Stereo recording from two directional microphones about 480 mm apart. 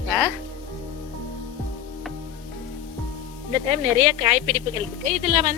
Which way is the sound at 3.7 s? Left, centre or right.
Centre.